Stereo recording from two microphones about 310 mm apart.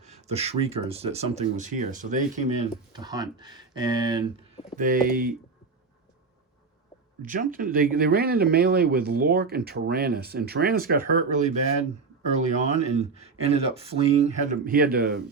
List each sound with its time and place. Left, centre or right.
0.0 s speech: right
4.8 s speech: right
7.2 s speech: right